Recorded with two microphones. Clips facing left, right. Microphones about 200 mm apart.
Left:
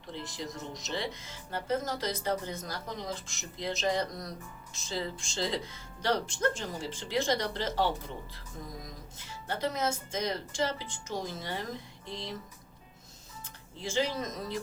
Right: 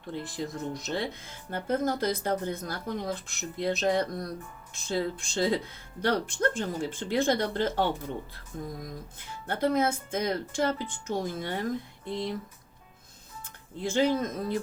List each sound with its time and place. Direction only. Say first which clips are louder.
0.1 s speech: right 5 dB; 55° right (ahead or behind)
13.8 s speech: right 6 dB; 55° right (ahead or behind)